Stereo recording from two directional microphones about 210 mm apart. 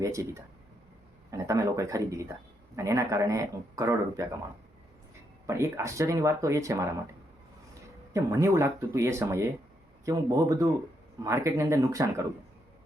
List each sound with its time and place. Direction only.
0.0 s speech: 15° right (ahead or behind)
5.5 s speech: 15° right (ahead or behind)
8.1 s speech: 15° right (ahead or behind)